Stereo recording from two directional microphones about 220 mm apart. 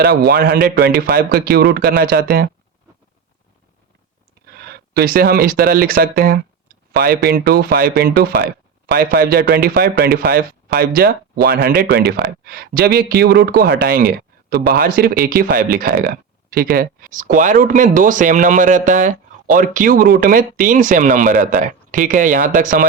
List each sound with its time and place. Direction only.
0.3 s a man's voice: 45° right (ahead or behind)
4.4 s a man's voice: 45° right (ahead or behind)